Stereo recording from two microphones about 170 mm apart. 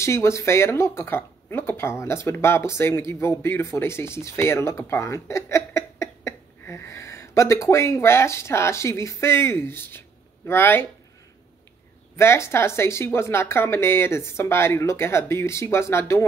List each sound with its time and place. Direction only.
0.0 s speech: 15° left (ahead or behind)
12.2 s speech: 15° left (ahead or behind)